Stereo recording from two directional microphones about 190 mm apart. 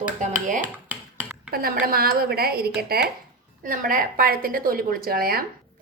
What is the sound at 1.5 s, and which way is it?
A woman's voice, 50° right (ahead or behind).